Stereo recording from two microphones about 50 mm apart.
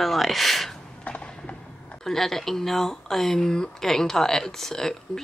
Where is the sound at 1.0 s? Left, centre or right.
Left.